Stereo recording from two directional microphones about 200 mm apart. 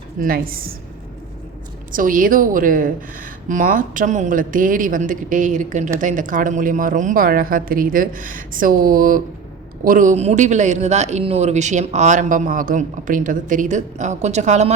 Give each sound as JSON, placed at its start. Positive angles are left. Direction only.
{"t": 0.2, "sound": "a woman's voice", "side_deg": -45}
{"t": 1.9, "sound": "a woman's voice", "side_deg": -40}